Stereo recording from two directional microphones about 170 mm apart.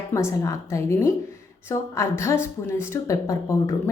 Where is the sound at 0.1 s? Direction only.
15° left (ahead or behind).